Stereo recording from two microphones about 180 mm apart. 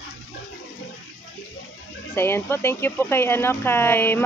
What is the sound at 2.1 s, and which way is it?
Speech, 15° left (ahead or behind).